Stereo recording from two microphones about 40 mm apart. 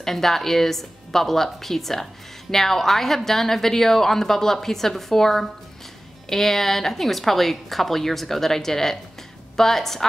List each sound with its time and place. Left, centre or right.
0.0 s speech: centre